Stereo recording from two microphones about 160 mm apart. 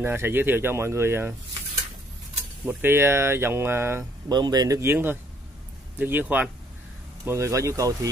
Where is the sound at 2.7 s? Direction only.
15° right (ahead or behind).